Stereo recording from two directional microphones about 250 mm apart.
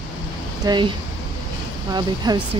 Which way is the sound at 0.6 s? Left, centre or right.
Centre.